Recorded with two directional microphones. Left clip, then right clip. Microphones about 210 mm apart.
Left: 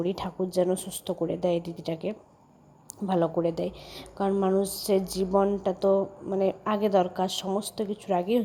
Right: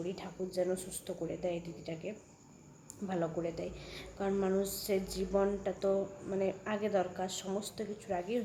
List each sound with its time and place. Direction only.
0.0 s a woman's voice: 35° left (ahead or behind)